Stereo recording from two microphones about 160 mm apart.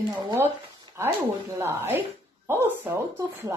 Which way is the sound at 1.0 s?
15° right (ahead or behind).